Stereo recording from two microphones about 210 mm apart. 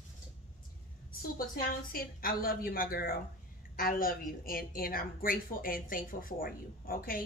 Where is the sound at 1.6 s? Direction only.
45° left (ahead or behind).